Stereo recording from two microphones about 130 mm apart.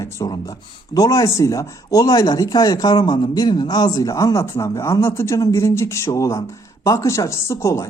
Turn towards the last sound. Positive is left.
turn(degrees=20)  # may be behind; listen again after turning